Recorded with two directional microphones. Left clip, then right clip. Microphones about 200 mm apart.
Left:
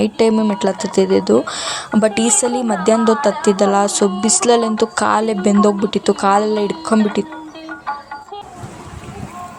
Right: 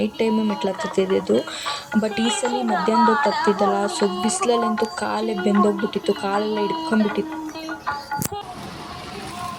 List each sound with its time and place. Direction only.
0.0 s a woman's voice: 25° left (ahead or behind)
2.3 s speech: 55° left (ahead or behind)
3.4 s a woman's voice: 25° left (ahead or behind)
4.0 s speech: 60° left (ahead or behind)
4.3 s a woman's voice: 25° left (ahead or behind)